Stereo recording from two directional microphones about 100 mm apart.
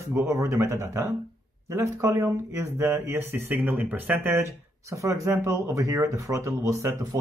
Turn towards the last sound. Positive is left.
turn(degrees=-35)  # may be behind; listen again after turning